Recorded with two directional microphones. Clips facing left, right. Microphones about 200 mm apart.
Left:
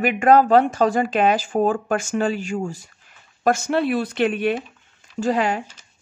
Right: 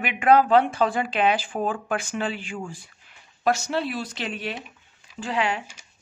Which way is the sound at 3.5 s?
55° left (ahead or behind).